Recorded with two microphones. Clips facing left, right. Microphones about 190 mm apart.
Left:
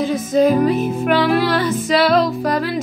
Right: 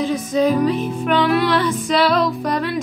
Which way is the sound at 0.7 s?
5° left (ahead or behind).